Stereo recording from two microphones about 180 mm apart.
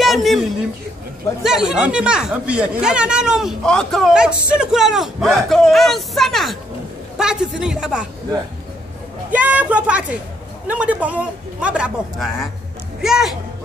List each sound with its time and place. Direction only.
0.0 s a sound: centre (ahead or behind)
1.4 s speech: 5° right (ahead or behind)
9.3 s a man's voice: 10° right (ahead or behind)